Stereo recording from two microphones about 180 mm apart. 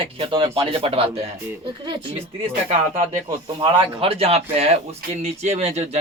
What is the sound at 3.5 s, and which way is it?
Speech, 30° right (ahead or behind).